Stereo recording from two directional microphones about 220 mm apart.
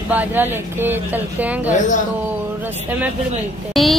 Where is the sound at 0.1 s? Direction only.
10° right (ahead or behind).